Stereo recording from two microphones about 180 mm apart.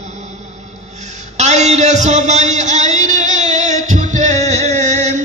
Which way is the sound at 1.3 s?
40° right (ahead or behind).